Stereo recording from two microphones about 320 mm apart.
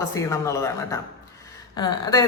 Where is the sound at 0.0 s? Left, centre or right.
Centre.